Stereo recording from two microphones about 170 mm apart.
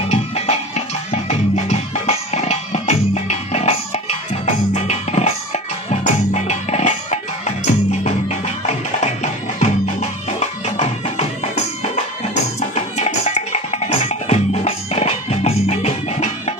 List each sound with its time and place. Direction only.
0.1 s music: 40° left (ahead or behind)